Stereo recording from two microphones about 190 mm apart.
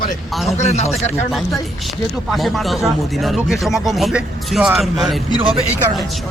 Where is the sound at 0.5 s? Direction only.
35° left (ahead or behind).